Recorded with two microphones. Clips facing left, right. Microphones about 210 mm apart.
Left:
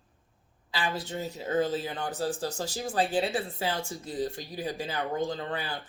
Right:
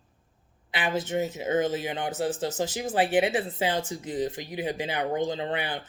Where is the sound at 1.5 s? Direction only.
80° right.